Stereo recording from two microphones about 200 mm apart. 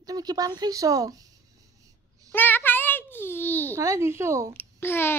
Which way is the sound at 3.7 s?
15° right (ahead or behind).